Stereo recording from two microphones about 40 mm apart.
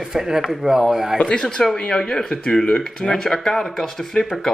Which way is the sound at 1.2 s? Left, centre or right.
Left.